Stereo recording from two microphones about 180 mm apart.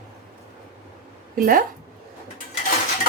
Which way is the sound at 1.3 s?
50° right (ahead or behind).